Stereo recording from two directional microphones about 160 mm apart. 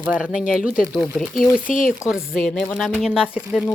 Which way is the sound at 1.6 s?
55° left (ahead or behind).